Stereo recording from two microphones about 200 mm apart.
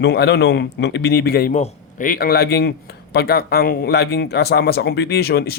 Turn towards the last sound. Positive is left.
turn(degrees=50)  # may be behind; listen again after turning